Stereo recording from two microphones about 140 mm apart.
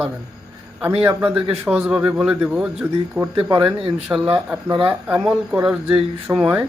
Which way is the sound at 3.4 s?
35° right (ahead or behind).